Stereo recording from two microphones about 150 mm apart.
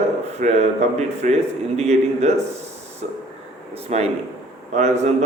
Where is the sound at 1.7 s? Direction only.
45° right (ahead or behind).